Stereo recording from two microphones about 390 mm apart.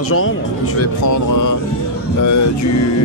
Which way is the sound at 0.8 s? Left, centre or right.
Left.